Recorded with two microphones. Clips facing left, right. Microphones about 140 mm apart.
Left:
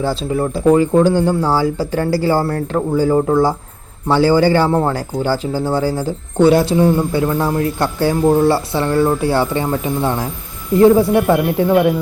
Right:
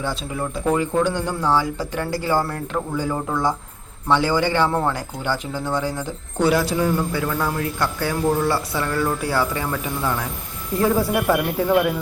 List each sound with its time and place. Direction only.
0.0 s speech: 30° left (ahead or behind)